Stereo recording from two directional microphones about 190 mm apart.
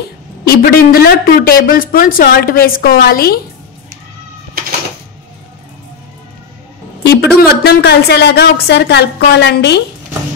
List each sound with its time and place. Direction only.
0.5 s a woman's voice: 50° left (ahead or behind)
7.0 s a sound: 60° left (ahead or behind)
7.3 s a woman's voice: 60° left (ahead or behind)